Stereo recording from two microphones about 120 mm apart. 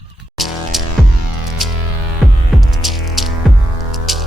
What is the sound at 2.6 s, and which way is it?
Music, centre (ahead or behind).